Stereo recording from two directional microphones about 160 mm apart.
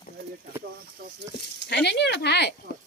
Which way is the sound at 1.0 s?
75° right (ahead or behind).